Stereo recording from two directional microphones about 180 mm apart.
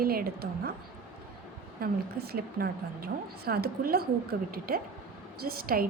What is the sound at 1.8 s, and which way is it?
A woman's voice, 60° right (ahead or behind).